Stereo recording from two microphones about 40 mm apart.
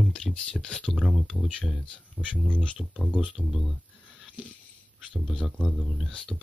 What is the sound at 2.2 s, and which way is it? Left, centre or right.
Speech, left.